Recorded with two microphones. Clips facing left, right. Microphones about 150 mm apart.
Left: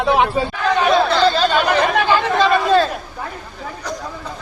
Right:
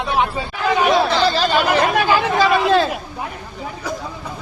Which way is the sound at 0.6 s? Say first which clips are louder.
Even; 10° right (ahead or behind).